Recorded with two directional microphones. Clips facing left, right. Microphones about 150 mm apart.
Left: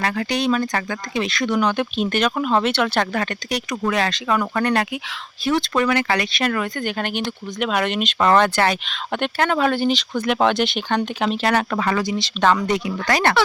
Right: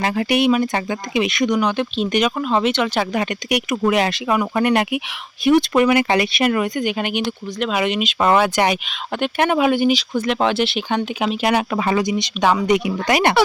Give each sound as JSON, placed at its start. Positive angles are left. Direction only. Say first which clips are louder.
{"t": 0.0, "sound": "speech", "louder": "right 4 dB", "side_deg": -25}
{"t": 1.7, "sound": "speech", "louder": "right 2 dB", "side_deg": 5}
{"t": 10.2, "sound": "speech", "louder": "left 1 dB", "side_deg": 0}